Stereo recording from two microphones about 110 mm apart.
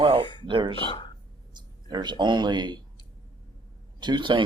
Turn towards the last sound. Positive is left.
turn(degrees=-45)  # may be behind; listen again after turning